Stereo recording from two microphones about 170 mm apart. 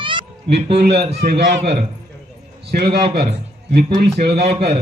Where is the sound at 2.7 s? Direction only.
70° right (ahead or behind).